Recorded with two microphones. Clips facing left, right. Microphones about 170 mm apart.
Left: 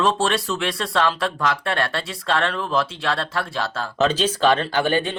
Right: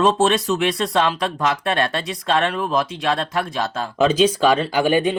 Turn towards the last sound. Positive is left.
turn(degrees=-15)  # may be behind; listen again after turning